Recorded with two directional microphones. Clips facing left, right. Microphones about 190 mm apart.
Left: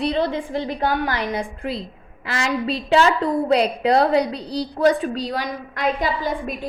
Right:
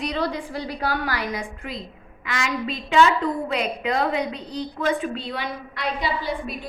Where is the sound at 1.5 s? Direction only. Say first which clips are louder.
Left 6 dB; 35° left (ahead or behind).